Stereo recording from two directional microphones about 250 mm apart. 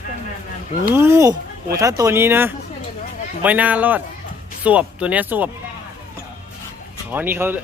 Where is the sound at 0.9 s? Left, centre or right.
Centre.